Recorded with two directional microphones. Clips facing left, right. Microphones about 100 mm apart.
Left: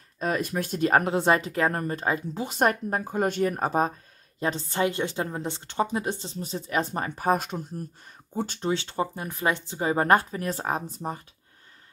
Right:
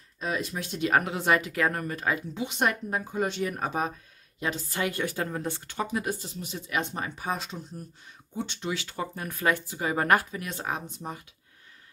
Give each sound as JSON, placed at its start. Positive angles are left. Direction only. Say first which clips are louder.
{"t": 0.2, "sound": "a woman's voice", "louder": "left 4 dB", "side_deg": 50}
{"t": 8.4, "sound": "speech", "louder": "left 5 dB", "side_deg": 40}